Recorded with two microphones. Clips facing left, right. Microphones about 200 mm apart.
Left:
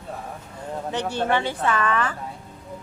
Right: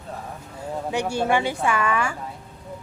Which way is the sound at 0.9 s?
10° right (ahead or behind).